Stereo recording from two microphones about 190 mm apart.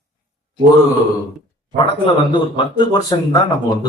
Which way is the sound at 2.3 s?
25° left (ahead or behind).